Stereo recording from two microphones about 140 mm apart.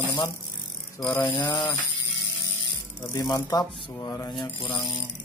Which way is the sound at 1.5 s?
30° left (ahead or behind).